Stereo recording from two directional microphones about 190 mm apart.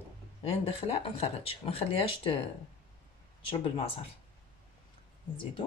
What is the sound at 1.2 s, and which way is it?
Speech, 30° left (ahead or behind).